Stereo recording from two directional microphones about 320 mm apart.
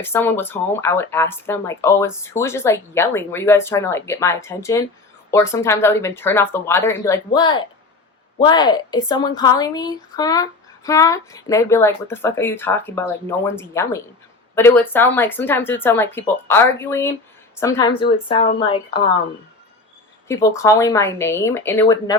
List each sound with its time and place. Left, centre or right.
0.0 s speech: centre
20.2 s speech: centre